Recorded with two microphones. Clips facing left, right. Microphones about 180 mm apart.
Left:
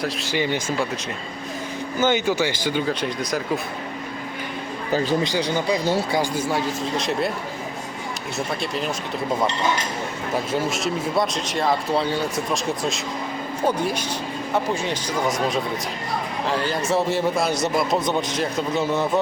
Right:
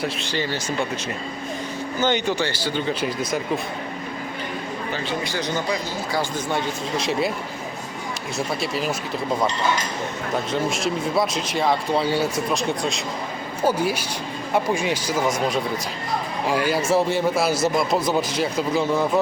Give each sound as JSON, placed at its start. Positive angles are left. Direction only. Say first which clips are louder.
{"t": 0.0, "sound": "speech", "louder": "even", "side_deg": 0}
{"t": 0.3, "sound": "speech", "louder": "left 4 dB", "side_deg": 15}
{"t": 2.0, "sound": "speech", "louder": "left 2 dB", "side_deg": 5}
{"t": 2.8, "sound": "speech", "louder": "even", "side_deg": 0}
{"t": 4.9, "sound": "speech", "louder": "left 9 dB", "side_deg": 40}
{"t": 5.2, "sound": "speech", "louder": "left 4 dB", "side_deg": 15}
{"t": 6.5, "sound": "speech", "louder": "left 1 dB", "side_deg": 0}
{"t": 8.6, "sound": "speech", "louder": "right 1 dB", "side_deg": -5}
{"t": 10.5, "sound": "speech", "louder": "right 1 dB", "side_deg": 0}